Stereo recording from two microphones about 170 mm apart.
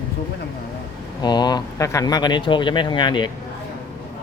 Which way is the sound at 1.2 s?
25° left (ahead or behind).